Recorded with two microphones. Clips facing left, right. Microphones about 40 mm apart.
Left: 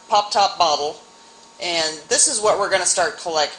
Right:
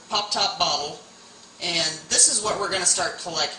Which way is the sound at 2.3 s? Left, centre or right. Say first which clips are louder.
Left 10 dB; left.